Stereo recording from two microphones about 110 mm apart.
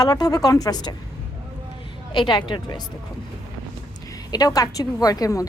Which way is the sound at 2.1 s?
45° left (ahead or behind).